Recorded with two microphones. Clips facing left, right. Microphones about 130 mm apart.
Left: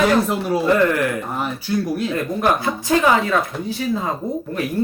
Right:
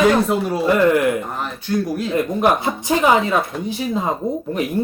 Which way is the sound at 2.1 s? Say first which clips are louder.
Right 4 dB; 20° right (ahead or behind).